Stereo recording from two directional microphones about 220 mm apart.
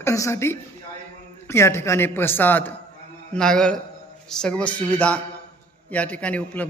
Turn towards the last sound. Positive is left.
turn(degrees=5)  # may be behind; listen again after turning